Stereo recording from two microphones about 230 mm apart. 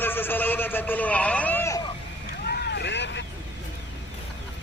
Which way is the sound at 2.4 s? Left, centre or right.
Left.